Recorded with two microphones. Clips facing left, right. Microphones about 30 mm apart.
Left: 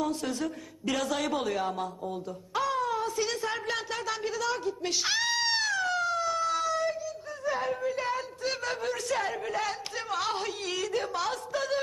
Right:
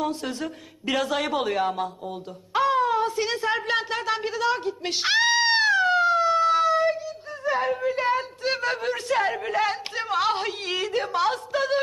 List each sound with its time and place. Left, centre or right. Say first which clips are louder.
0.0 s speech: right 2 dB; right